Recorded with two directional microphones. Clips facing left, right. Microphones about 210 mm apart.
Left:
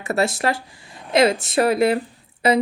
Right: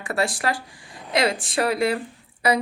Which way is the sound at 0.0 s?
25° left (ahead or behind).